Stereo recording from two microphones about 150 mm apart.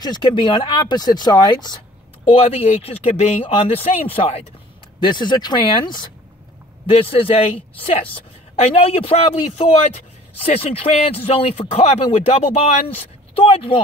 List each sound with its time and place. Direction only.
0.0 s speech: 30° left (ahead or behind)
2.2 s speech: 40° left (ahead or behind)
5.0 s speech: 30° left (ahead or behind)